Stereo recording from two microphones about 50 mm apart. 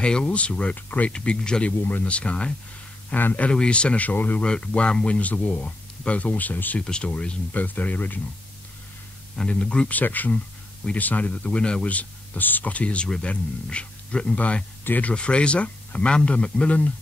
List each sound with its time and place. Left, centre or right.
0.0 s speech: left
0.7 s speech: left
1.1 s speech: centre
3.5 s speech: centre; by 4.4 s left
4.4 s speech: left
6.8 s speech: centre; by 8.2 s left
9.4 s speech: left
9.9 s speech: left
11.9 s speech: left